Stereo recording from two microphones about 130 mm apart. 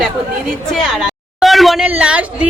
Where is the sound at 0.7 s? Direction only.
Centre (ahead or behind).